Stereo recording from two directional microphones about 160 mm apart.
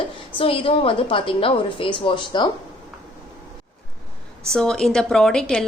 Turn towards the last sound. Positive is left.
turn(degrees=5)  # may be behind; listen again after turning